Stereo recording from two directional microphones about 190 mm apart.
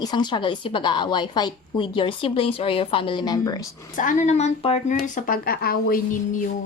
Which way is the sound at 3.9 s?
40° left (ahead or behind).